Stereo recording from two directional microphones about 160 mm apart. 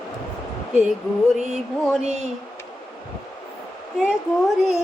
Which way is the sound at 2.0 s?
45° right (ahead or behind).